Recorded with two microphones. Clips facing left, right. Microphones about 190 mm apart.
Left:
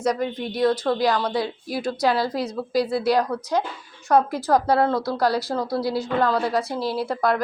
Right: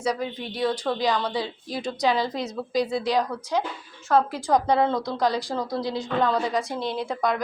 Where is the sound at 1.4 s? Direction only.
10° left (ahead or behind).